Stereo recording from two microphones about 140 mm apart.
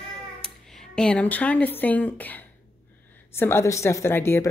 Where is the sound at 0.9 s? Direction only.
5° left (ahead or behind).